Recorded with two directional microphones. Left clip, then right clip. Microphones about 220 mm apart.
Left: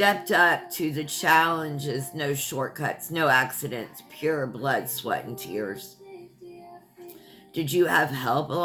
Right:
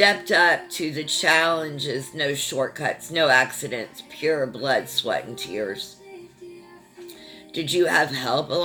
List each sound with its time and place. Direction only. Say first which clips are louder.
0.0 s speech: right 3 dB; 25° left (ahead or behind)
7.5 s speech: right 2 dB; 25° left (ahead or behind)